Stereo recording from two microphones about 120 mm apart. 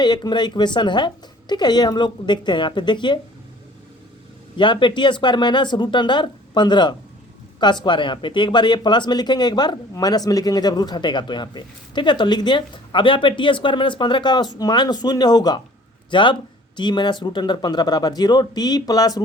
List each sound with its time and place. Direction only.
0.0 s speech: 40° left (ahead or behind)
4.5 s speech: 40° left (ahead or behind)